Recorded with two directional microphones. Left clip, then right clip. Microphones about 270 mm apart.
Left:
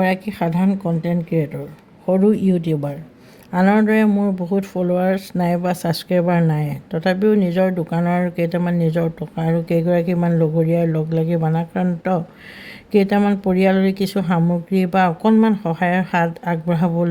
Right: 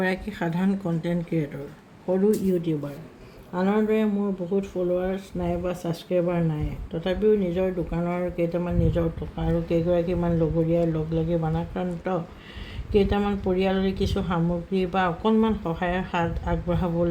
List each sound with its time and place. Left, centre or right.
0.0 s speech: left